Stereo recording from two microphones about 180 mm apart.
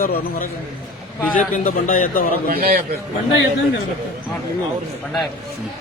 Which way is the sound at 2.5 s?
60° right (ahead or behind).